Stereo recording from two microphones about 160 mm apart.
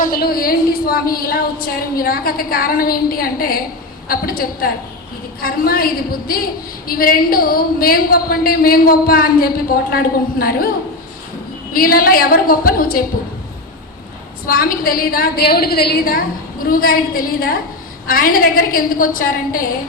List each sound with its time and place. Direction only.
0.0 s a woman's voice: 70° left (ahead or behind)
14.4 s a woman's voice: 65° left (ahead or behind)